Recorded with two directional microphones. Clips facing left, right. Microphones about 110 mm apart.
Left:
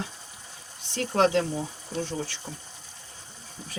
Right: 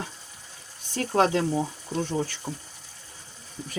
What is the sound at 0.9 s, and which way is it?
Speech, 40° right (ahead or behind).